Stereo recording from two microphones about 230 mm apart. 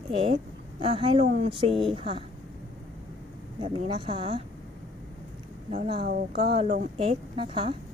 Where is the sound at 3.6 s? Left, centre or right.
Right.